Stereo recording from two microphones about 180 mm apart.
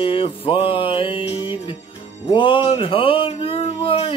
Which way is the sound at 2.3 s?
30° left (ahead or behind).